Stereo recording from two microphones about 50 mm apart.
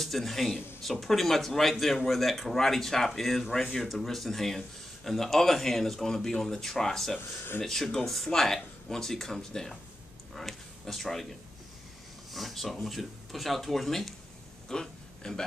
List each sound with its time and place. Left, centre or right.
0.0 s a man's voice: centre
7.2 s speech: left
7.6 s a man's voice: centre
14.7 s a sound: centre